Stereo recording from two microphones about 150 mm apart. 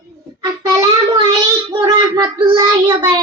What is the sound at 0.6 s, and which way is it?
Child singing, 25° right (ahead or behind).